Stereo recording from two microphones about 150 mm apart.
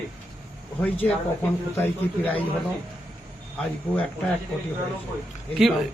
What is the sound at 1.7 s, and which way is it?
Speech, 15° left (ahead or behind).